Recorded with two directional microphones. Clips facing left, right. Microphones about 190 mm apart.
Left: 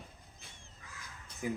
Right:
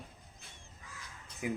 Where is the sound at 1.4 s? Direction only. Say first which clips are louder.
Even; 15° right (ahead or behind).